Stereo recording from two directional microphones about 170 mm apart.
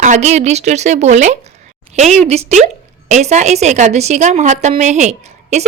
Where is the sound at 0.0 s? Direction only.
45° right (ahead or behind).